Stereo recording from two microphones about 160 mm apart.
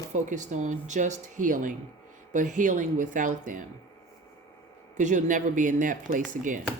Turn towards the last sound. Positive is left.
turn(degrees=-55)  # may be behind; listen again after turning